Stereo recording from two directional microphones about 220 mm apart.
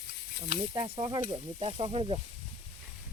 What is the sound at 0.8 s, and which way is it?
Sizzle, 20° right (ahead or behind).